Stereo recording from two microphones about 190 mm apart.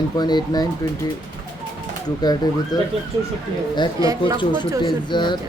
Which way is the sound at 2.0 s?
20° left (ahead or behind).